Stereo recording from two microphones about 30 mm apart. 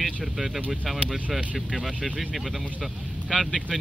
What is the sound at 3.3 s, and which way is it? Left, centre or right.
Speech, centre.